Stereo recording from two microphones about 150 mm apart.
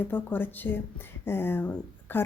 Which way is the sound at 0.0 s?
15° left (ahead or behind).